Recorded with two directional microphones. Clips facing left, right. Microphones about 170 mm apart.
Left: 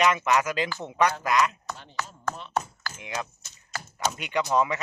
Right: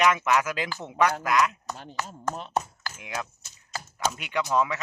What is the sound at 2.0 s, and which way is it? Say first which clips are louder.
Speech: right 2 dB; 40° right (ahead or behind).